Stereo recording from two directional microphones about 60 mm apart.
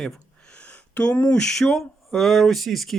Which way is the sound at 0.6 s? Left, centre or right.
Left.